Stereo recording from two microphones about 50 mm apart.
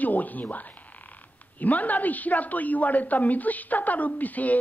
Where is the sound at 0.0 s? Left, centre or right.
Left.